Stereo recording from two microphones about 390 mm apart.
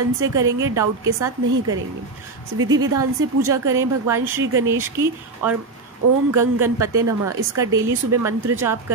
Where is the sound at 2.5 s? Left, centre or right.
Right.